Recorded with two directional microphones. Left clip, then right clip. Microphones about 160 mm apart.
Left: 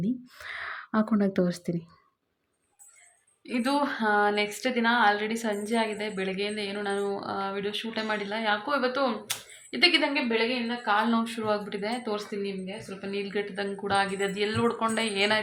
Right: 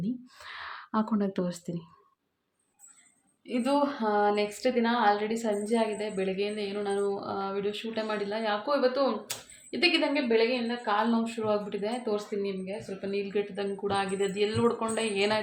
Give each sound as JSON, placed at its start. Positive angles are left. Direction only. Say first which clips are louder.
{"t": 0.0, "sound": "speech", "louder": "left 4 dB", "side_deg": 20}
{"t": 3.4, "sound": "a woman's voice", "louder": "even", "side_deg": -5}